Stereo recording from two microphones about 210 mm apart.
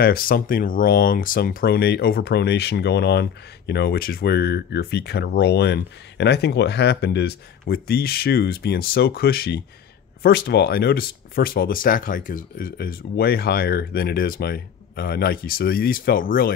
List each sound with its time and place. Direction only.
0.0 s speech: 45° left (ahead or behind)